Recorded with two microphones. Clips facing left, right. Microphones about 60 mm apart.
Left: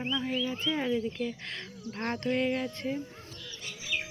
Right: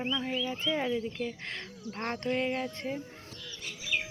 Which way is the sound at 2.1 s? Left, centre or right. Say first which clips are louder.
Left 2 dB; right.